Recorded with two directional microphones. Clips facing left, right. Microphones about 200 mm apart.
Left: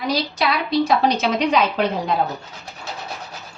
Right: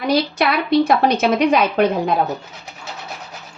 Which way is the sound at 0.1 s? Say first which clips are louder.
Right 5 dB; 55° right (ahead or behind).